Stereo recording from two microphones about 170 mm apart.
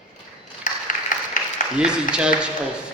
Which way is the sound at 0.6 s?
50° left (ahead or behind).